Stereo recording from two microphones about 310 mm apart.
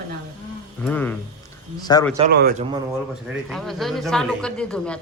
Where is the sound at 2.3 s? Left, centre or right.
Right.